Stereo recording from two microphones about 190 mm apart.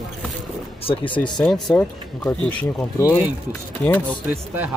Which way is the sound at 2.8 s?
20° left (ahead or behind).